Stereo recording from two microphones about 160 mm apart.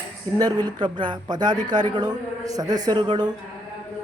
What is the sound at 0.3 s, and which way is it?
Speech, 25° right (ahead or behind).